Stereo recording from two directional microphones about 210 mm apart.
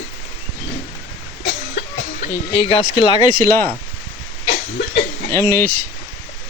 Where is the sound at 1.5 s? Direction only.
50° left (ahead or behind).